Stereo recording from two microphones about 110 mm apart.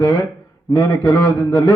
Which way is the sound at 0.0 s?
30° left (ahead or behind).